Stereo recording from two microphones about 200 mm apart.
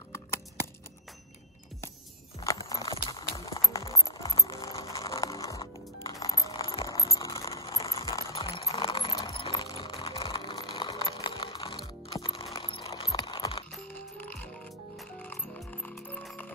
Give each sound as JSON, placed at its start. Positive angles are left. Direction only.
{"t": 2.4, "sound": "music", "side_deg": 15}
{"t": 6.9, "sound": "a sound", "side_deg": 15}
{"t": 14.1, "sound": "music", "side_deg": 10}